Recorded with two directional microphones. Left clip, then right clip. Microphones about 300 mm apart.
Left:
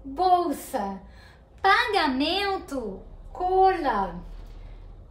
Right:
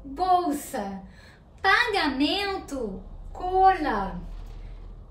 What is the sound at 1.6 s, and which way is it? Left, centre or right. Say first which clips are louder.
A child's voice: left 1 dB; centre.